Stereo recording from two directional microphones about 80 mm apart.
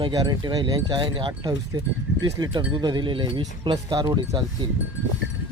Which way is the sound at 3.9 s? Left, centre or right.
Right.